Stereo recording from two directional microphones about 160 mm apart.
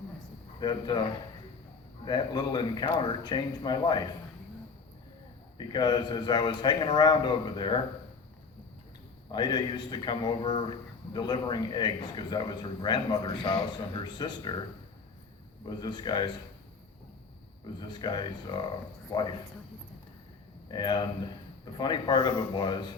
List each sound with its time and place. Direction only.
0.6 s speech: 25° left (ahead or behind)
2.0 s speech: 25° left (ahead or behind)
5.5 s speech: 25° left (ahead or behind)
9.3 s speech: 25° left (ahead or behind)
15.6 s speech: 25° left (ahead or behind)
17.7 s speech: 30° left (ahead or behind)
20.7 s speech: 25° left (ahead or behind)